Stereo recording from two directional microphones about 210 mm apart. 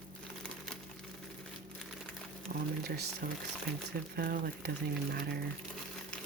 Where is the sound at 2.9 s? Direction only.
45° right (ahead or behind).